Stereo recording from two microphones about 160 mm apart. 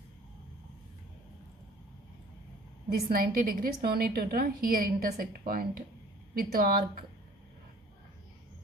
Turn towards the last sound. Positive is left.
turn(degrees=-65)  # may be behind; listen again after turning